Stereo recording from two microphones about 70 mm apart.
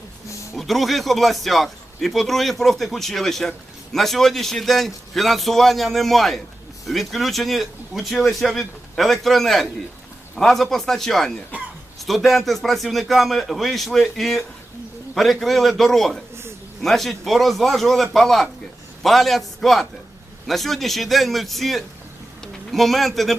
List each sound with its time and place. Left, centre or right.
0.5 s a man's voice: centre